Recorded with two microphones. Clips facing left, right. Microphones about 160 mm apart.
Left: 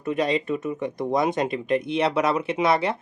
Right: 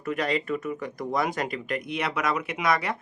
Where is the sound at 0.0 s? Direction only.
20° left (ahead or behind).